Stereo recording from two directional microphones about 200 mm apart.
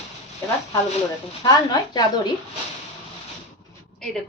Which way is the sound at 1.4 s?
20° left (ahead or behind).